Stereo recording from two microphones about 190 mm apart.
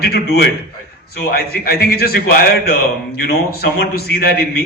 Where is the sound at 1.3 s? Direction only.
55° left (ahead or behind).